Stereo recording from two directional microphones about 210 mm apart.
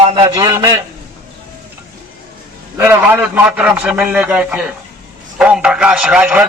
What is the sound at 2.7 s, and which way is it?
A man's voice, 10° right (ahead or behind).